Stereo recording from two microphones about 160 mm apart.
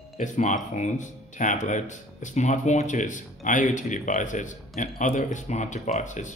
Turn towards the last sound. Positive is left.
turn(degrees=50)  # may be behind; listen again after turning